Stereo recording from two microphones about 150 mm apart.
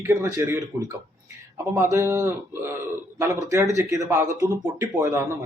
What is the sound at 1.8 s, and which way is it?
Speech, 15° right (ahead or behind).